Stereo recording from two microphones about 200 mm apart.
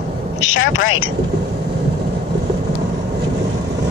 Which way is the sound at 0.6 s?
80° left.